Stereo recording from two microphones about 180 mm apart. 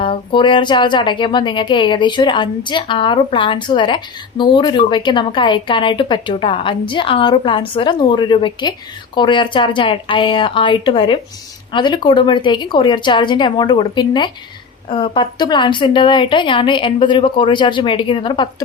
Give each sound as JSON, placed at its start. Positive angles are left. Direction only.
{"t": 0.0, "sound": "a woman's voice", "side_deg": 30}